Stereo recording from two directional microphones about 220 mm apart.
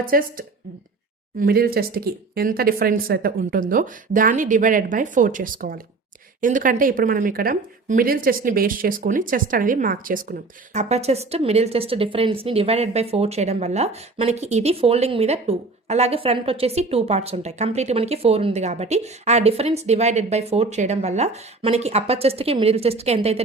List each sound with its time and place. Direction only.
0.0 s speech: 40° right (ahead or behind)
10.8 s a woman's voice: 30° right (ahead or behind)